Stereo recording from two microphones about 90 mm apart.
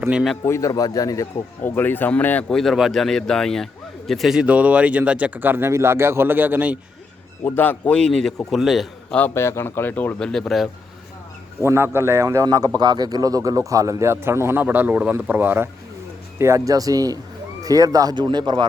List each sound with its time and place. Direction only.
0.4 s a man's voice: 30° left (ahead or behind)
0.7 s a man's voice: 45° left (ahead or behind)
1.6 s speech: 20° left (ahead or behind)
2.5 s a man's voice: 5° left (ahead or behind); by 6.7 s 20° right (ahead or behind)
7.4 s a man's voice: 20° left (ahead or behind); by 9.1 s centre (ahead or behind)
9.3 s speech: 30° left (ahead or behind)
10.2 s a man's voice: 10° left (ahead or behind)
11.6 s a man's voice: 30° right (ahead or behind)
16.4 s speech: 35° right (ahead or behind); by 18.6 s 55° right (ahead or behind)